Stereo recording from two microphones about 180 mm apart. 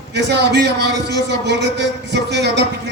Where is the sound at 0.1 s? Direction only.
70° right (ahead or behind).